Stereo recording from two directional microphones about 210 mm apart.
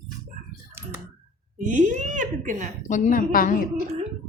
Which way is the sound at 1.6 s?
35° right (ahead or behind).